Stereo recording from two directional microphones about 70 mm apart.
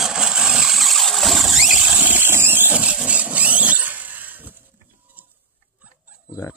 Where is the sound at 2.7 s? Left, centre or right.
Centre.